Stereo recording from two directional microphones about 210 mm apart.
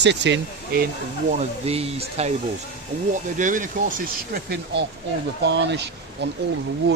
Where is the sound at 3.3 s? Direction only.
40° right (ahead or behind).